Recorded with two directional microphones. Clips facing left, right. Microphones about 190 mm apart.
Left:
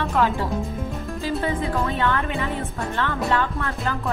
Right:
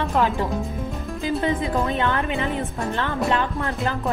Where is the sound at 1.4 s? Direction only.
20° right (ahead or behind).